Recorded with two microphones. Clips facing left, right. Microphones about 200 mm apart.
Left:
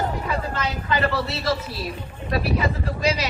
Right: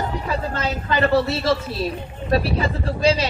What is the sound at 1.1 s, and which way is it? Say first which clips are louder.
A woman's voice: right 6 dB; 25° right (ahead or behind).